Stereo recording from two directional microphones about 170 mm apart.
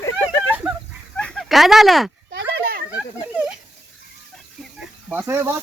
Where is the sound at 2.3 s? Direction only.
90° right.